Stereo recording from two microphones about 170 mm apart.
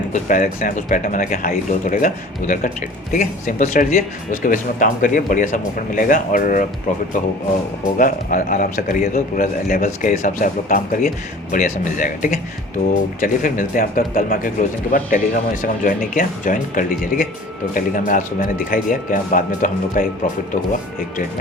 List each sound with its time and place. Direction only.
0.1 s speech: 50° left (ahead or behind)
7.9 s speech: 55° left (ahead or behind)